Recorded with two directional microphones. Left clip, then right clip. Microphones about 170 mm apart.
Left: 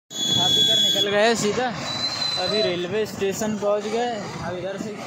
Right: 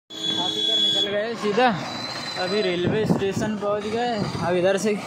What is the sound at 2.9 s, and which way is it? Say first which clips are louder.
Speech: right 1 dB; 10° left (ahead or behind).